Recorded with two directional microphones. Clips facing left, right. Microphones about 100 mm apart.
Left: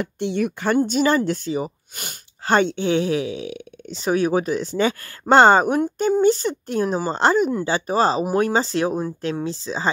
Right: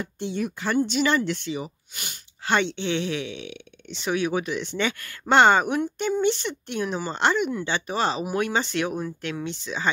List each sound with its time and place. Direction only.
0.0 s speech: 70° left (ahead or behind)
0.7 s speech: 45° left (ahead or behind)